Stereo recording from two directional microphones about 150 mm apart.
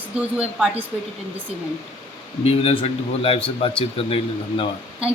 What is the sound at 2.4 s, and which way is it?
Speech, 40° left (ahead or behind).